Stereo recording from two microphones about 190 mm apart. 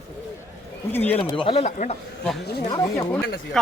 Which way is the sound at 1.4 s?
35° left (ahead or behind).